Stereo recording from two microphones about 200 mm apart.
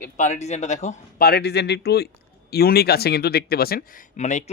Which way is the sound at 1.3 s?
55° left (ahead or behind).